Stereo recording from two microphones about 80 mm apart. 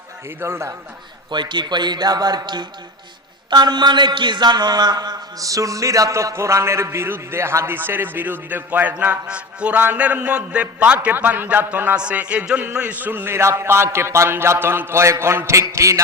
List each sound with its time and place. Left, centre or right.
0.3 s a man's voice: right
1.3 s a man's voice: right
3.5 s a man's voice: right
5.4 s a man's voice: right